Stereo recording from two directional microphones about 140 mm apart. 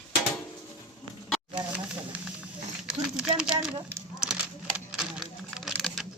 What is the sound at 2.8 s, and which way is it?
Speech, 5° right (ahead or behind).